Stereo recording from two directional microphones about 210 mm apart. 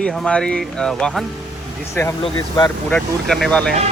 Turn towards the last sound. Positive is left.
turn(degrees=5)  # may be behind; listen again after turning